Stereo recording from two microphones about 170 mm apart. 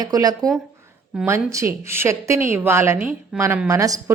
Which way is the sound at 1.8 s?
15° right (ahead or behind).